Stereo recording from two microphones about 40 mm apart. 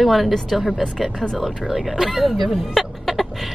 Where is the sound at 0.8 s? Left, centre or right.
Centre.